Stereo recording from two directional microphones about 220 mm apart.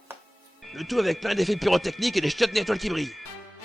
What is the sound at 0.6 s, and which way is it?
Speech, centre (ahead or behind).